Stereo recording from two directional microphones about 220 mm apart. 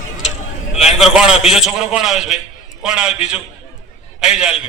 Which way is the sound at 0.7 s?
30° left (ahead or behind).